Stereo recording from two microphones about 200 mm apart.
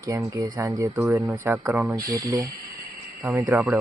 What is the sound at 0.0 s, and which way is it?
Speech, 15° right (ahead or behind).